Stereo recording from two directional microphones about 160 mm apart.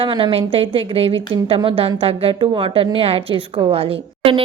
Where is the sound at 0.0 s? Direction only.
35° right (ahead or behind).